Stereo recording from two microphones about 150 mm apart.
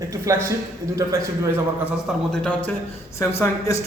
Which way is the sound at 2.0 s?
5° left (ahead or behind).